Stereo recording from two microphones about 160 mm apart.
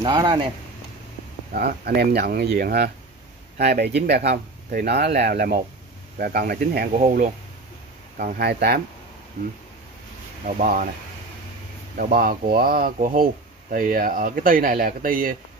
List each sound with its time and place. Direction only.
0.0 s speech: 30° right (ahead or behind)
1.5 s speech: 70° right (ahead or behind)
3.5 s speech: 80° right
8.2 s speech: 75° right (ahead or behind)
10.4 s speech: 60° right (ahead or behind)
12.0 s speech: 65° right (ahead or behind)